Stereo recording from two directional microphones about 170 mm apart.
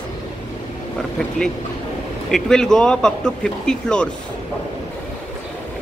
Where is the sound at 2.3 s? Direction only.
5° left (ahead or behind).